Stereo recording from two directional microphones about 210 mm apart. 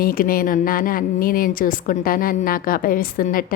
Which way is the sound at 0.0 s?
45° left (ahead or behind).